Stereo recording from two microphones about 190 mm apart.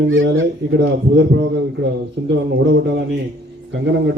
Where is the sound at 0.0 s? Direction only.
80° right; by 3.0 s 65° right (ahead or behind).